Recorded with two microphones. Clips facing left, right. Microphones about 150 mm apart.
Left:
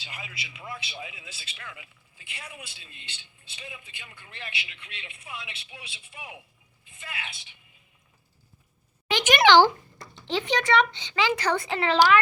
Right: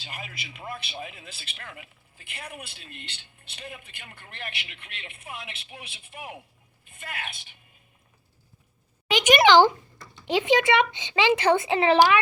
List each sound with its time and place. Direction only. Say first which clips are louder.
0.0 s speech: right 2 dB; 45° right (ahead or behind)
9.1 s a child's voice: right 1 dB; 10° right (ahead or behind)
10.2 s speech: right 4 dB; 15° right (ahead or behind)